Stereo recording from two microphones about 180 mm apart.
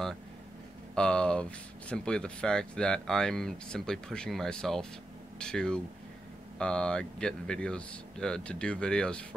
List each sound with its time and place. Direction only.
0.9 s speech: 5° left (ahead or behind)